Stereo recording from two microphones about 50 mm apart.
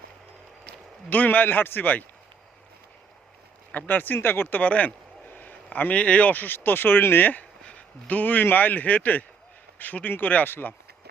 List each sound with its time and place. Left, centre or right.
1.1 s speech: left
3.7 s speech: left
4.6 s a sound: left
5.7 s speech: left
7.6 s speech: left